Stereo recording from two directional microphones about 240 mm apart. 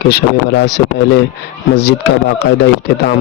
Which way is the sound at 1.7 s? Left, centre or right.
Left.